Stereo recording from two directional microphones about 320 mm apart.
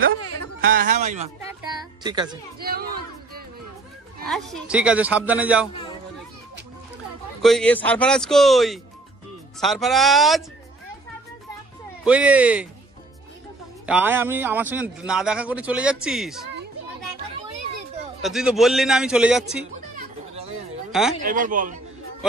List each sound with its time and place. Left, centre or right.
0.6 s a man's voice: right
2.6 s a sound: right
4.3 s a man's voice: centre
7.4 s a man's voice: centre
12.0 s a man's voice: centre
13.8 s a man's voice: centre
18.2 s a man's voice: centre
20.0 s music: centre
21.2 s a man's voice: right